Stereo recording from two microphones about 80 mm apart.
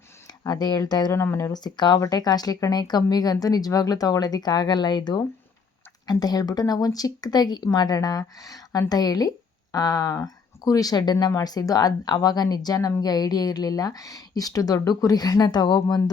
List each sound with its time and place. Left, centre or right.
0.3 s speech: left
1.1 s speech: left
1.5 s speech: left
2.0 s speech: left
6.1 s speech: left